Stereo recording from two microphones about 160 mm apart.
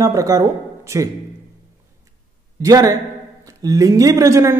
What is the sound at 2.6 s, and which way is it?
Speech, 20° right (ahead or behind).